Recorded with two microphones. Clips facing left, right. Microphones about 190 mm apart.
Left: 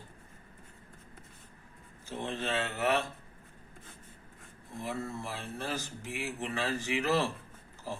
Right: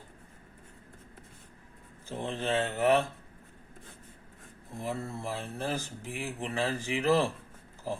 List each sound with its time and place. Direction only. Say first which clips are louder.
2.0 s speech: right 3 dB; 35° right (ahead or behind)
4.8 s speech: right 1 dB; 35° right (ahead or behind)